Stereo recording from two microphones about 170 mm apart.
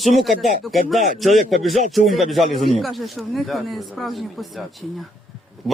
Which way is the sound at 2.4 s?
35° right (ahead or behind).